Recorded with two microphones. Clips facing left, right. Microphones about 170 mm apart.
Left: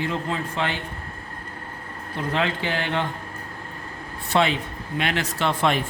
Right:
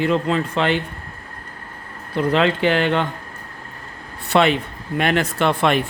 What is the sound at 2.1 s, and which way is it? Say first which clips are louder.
Speech: right 7 dB; 75° right (ahead or behind).